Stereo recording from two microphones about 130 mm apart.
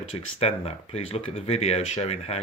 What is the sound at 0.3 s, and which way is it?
Speech, 50° left (ahead or behind).